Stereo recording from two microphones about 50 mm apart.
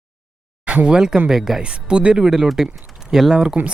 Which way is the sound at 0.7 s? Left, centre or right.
Right.